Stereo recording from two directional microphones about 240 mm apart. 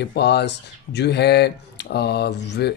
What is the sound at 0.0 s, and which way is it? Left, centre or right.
Speech, left.